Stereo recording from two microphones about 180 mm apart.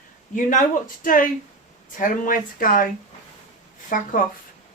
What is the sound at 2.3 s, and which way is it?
Speech, 50° left (ahead or behind).